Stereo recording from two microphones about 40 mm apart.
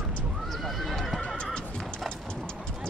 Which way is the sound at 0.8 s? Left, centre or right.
Centre.